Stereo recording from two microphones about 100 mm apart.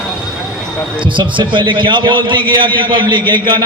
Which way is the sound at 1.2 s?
55° right (ahead or behind).